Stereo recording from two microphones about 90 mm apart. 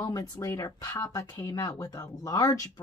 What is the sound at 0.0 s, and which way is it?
Speech, 35° left (ahead or behind).